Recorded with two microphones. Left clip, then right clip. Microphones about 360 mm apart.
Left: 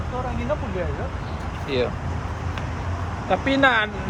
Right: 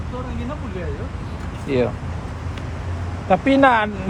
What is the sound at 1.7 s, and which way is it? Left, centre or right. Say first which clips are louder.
Speech: right 4 dB; right.